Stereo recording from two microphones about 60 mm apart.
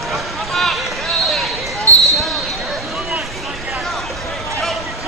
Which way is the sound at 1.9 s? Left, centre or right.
Left.